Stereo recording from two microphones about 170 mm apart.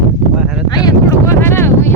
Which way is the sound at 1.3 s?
15° left (ahead or behind).